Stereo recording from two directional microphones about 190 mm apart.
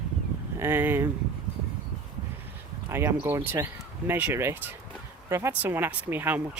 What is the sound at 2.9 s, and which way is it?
Speech, 15° right (ahead or behind).